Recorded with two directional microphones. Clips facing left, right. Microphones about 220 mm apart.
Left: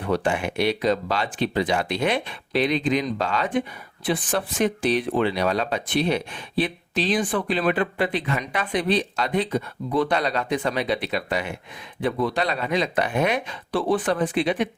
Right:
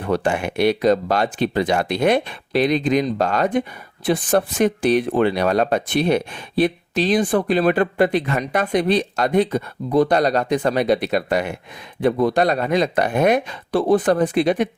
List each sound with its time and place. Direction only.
0.1 s speech: 45° right (ahead or behind)